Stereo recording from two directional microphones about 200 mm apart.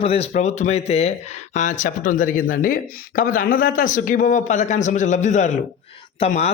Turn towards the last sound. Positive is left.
turn(degrees=35)  # may be behind; listen again after turning